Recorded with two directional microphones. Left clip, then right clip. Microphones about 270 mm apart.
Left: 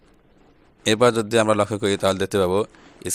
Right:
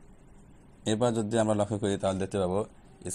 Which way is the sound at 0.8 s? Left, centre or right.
Left.